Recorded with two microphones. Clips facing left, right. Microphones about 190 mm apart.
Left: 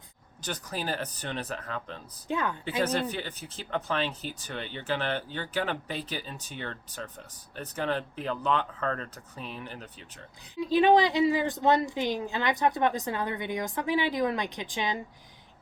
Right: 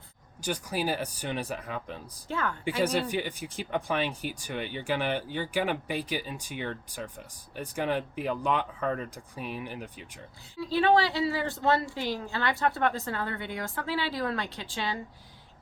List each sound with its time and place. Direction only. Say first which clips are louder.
0.4 s speech: right 4 dB; 10° right (ahead or behind)
2.2 s a woman's voice: left 2 dB; 20° left (ahead or behind)
2.6 s speech: right 2 dB; 10° right (ahead or behind)
10.6 s a woman's voice: left 3 dB; 15° left (ahead or behind)